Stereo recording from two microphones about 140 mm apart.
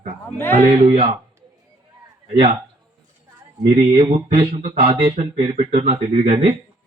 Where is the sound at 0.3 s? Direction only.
15° left (ahead or behind).